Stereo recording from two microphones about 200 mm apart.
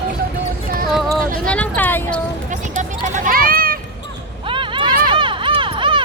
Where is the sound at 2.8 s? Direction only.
45° right (ahead or behind).